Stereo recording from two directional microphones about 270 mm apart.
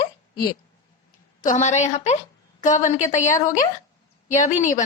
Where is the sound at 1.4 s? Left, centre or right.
Left.